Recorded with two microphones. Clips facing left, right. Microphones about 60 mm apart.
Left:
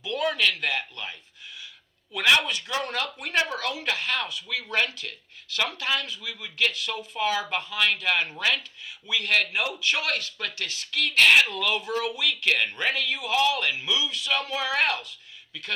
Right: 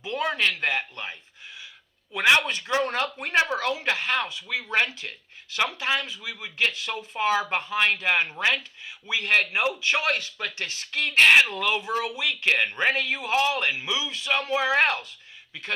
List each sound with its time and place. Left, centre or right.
0.0 s a man's voice: right
2.1 s a man's voice: right